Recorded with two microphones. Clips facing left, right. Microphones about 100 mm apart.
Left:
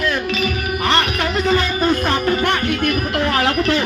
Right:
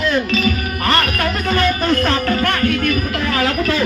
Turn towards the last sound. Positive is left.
turn(degrees=25)  # may be behind; listen again after turning